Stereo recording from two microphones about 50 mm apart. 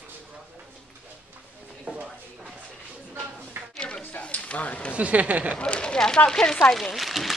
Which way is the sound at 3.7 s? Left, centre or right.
Centre.